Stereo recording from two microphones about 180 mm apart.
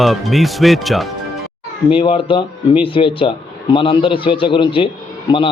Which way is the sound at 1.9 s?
30° left (ahead or behind).